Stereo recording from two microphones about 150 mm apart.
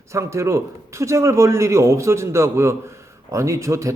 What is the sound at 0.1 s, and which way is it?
A man's voice, 20° right (ahead or behind).